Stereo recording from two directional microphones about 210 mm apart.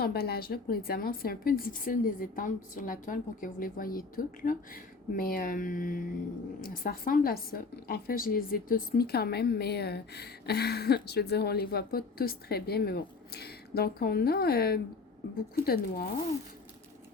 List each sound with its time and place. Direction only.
0.0 s a woman's voice: 50° left (ahead or behind)